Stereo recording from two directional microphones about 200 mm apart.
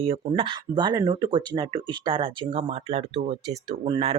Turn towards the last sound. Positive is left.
turn(degrees=-25)  # may be behind; listen again after turning